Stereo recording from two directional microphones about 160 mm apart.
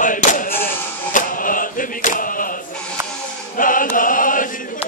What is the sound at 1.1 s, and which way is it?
Chant, 60° left (ahead or behind).